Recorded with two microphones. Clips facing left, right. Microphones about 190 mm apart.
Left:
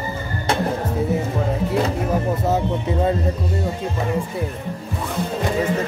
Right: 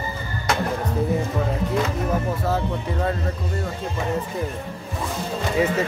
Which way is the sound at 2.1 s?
20° left (ahead or behind).